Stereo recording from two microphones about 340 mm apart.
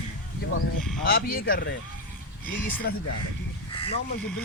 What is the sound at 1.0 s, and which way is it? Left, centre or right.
Speech, left.